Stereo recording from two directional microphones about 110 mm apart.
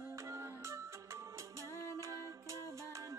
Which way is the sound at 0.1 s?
25° right (ahead or behind).